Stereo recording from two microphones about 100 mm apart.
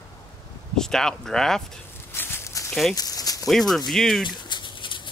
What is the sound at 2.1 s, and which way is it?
Walk, 25° left (ahead or behind).